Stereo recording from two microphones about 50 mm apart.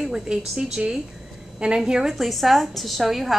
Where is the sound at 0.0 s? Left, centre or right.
Centre.